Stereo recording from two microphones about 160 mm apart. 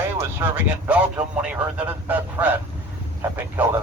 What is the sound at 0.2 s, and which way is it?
Speech, 15° right (ahead or behind).